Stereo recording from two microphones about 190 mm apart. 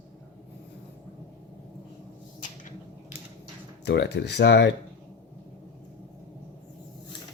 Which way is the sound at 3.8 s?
60° left (ahead or behind).